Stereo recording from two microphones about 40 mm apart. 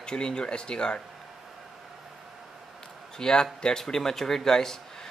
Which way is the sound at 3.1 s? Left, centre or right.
Centre.